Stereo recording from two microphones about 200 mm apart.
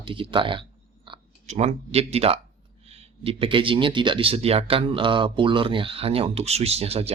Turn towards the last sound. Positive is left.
turn(degrees=-30)  # may be behind; listen again after turning